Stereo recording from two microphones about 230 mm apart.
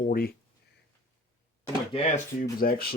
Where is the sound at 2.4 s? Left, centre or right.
Left.